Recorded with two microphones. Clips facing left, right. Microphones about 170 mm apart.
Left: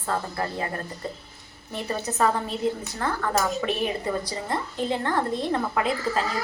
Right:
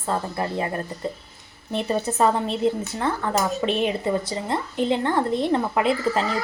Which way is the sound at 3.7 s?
25° right (ahead or behind).